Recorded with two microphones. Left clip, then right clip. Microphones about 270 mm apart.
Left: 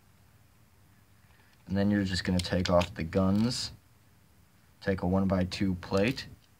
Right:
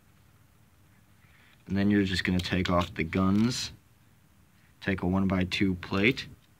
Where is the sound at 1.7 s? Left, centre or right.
Centre.